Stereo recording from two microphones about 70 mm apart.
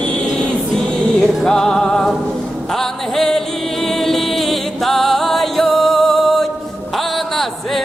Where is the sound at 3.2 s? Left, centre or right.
Centre.